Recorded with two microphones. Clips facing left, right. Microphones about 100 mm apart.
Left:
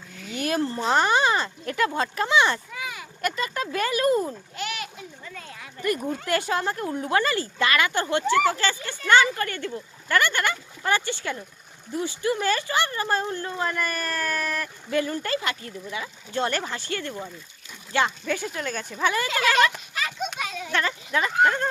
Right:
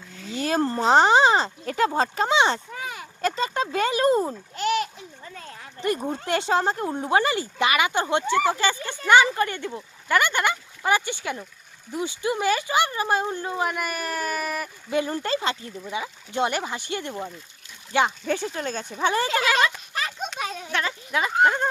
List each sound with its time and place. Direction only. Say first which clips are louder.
0.2 s a sound: right 2 dB; 30° right (ahead or behind)
0.6 s speech: right 3 dB; 45° right (ahead or behind)
0.9 s speech: right 5 dB; 25° right (ahead or behind)
2.7 s speech: right 1 dB; 40° right (ahead or behind); by 18.1 s 15° right (ahead or behind)
18.3 s speech: right 2 dB; 30° right (ahead or behind)
19.9 s children playing: even; 30° right (ahead or behind)
20.7 s speech: left 1 dB; 5° right (ahead or behind)